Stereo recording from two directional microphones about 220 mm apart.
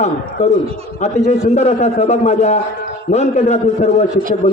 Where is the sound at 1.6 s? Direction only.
30° left (ahead or behind).